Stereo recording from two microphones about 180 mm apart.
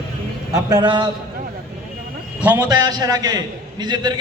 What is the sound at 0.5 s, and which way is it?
Speech, 20° right (ahead or behind).